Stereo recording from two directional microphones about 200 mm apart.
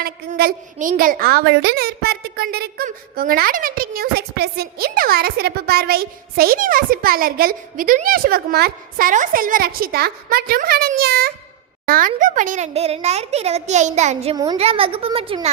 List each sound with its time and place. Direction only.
0.0 s a woman's voice: 50° right (ahead or behind); by 14.3 s 35° right (ahead or behind)
14.3 s a woman's voice: 20° right (ahead or behind)